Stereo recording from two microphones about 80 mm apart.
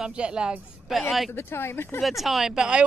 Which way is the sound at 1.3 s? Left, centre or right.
Left.